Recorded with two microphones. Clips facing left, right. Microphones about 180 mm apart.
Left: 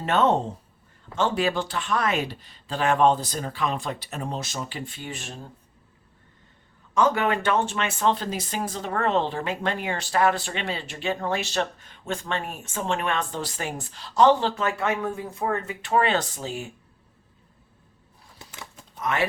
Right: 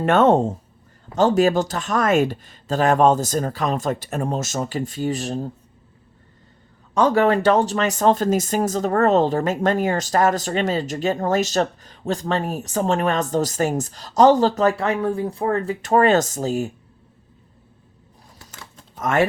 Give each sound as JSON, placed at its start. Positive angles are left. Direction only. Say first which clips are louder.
{"t": 0.0, "sound": "speech", "louder": "right 6 dB", "side_deg": -50}
{"t": 6.9, "sound": "speech", "louder": "right 5 dB", "side_deg": -35}
{"t": 18.3, "sound": "typewriter", "louder": "left 1 dB", "side_deg": 15}
{"t": 18.9, "sound": "speech", "louder": "right 6 dB", "side_deg": -45}